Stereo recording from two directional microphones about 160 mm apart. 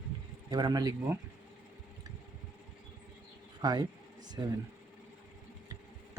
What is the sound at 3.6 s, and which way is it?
Speech, 25° right (ahead or behind).